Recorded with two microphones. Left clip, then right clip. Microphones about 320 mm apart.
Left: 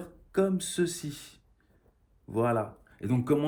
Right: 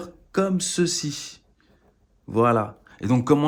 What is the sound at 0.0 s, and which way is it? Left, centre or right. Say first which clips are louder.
Speech: right 4 dB; centre.